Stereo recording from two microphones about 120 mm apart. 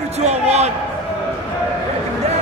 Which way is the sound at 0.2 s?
65° right (ahead or behind).